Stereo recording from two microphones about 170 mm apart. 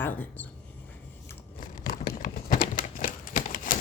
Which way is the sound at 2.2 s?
50° left (ahead or behind).